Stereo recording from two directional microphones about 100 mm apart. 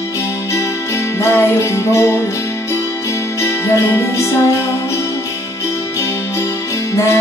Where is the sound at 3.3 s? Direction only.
25° left (ahead or behind).